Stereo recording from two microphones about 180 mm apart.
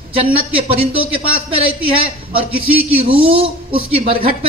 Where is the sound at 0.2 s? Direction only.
30° right (ahead or behind).